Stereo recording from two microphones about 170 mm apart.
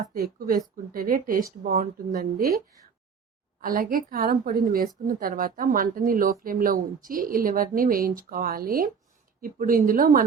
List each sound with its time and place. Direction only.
0.0 s speech: 60° right (ahead or behind)
3.6 s speech: 55° right (ahead or behind)